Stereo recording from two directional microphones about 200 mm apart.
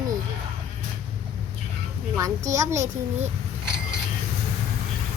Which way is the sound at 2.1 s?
15° right (ahead or behind).